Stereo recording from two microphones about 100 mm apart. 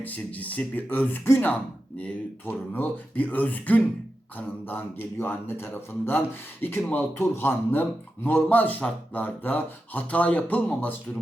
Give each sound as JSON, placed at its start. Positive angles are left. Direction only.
{"t": 0.0, "sound": "speech", "side_deg": 15}